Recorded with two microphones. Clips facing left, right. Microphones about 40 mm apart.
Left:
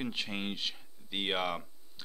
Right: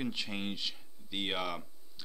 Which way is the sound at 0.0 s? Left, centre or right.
Centre.